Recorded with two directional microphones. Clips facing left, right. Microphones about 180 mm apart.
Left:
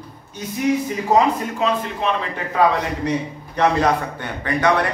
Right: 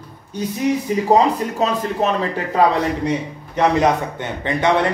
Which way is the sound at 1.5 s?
40° right (ahead or behind).